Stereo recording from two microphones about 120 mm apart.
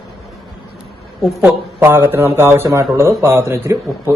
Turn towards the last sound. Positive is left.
turn(degrees=-25)  # may be behind; listen again after turning